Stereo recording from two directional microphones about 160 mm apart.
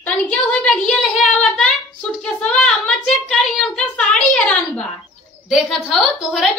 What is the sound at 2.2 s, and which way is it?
A woman's voice, 5° left (ahead or behind).